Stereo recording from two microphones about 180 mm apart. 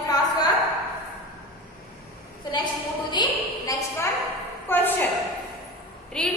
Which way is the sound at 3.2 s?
25° left (ahead or behind).